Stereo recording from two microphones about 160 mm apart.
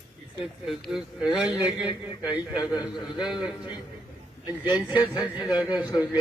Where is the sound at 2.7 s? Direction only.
30° left (ahead or behind).